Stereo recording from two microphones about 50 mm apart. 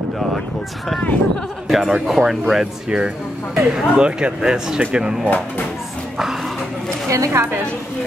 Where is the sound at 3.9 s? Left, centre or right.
Centre.